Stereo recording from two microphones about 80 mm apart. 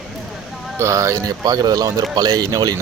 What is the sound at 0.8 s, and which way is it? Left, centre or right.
Speech, right.